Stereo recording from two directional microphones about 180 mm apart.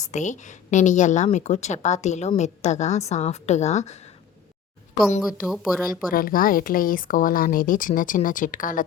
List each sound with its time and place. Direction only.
0.0 s a woman's voice: 40° left (ahead or behind)
5.2 s speech: centre (ahead or behind)
6.1 s speech: 50° left (ahead or behind)